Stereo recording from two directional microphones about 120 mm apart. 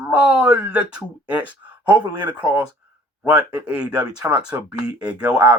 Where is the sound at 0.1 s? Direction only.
10° right (ahead or behind).